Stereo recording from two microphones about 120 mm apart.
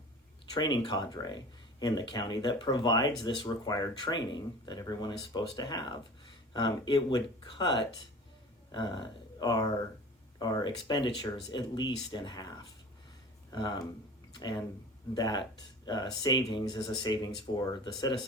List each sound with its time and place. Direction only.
0.5 s speech: 40° left (ahead or behind)
15.1 s speech: 35° left (ahead or behind)